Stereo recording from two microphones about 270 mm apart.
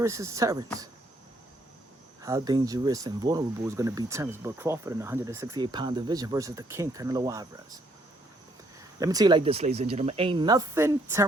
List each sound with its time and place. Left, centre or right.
0.0 s speech: centre
2.2 s speech: centre
9.0 s speech: centre